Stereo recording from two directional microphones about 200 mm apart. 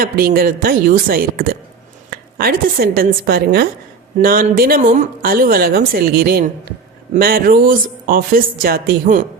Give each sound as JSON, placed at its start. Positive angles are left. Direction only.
{"t": 0.0, "sound": "a woman's voice", "side_deg": -45}